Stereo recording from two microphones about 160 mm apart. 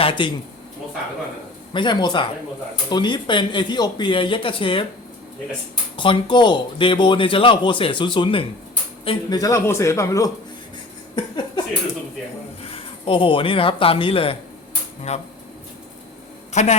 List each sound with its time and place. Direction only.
0.0 s speech: 30° left (ahead or behind)
1.7 s speech: 30° left (ahead or behind)
6.0 s speech: 30° left (ahead or behind)
11.1 s a sound: 30° left (ahead or behind)
12.7 s speech: 35° left (ahead or behind)
16.5 s speech: 45° left (ahead or behind)